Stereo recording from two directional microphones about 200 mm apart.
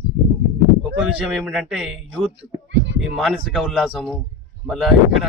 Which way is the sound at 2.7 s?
65° right (ahead or behind).